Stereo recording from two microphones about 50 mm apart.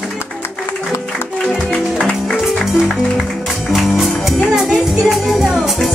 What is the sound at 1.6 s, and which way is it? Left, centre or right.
Music, left.